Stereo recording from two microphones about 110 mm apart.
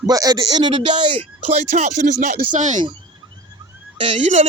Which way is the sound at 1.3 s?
85° right.